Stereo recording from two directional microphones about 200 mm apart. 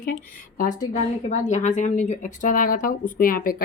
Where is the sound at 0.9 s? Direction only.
35° left (ahead or behind).